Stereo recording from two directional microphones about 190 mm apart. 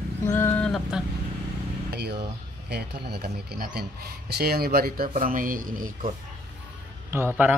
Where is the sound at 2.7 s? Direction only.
60° right (ahead or behind).